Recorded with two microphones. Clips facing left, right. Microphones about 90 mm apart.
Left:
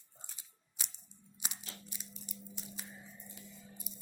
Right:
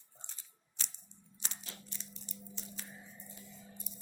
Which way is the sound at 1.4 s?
10° left (ahead or behind).